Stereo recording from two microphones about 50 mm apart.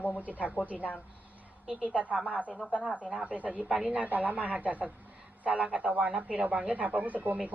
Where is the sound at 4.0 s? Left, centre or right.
Right.